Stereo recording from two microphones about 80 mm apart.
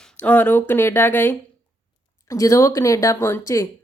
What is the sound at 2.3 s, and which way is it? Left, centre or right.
A woman's voice, left.